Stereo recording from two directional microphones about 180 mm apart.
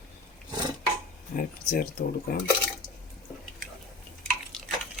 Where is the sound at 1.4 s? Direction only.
55° left (ahead or behind).